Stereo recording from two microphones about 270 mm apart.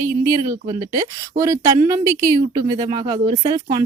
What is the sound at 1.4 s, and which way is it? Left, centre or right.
Speech, centre.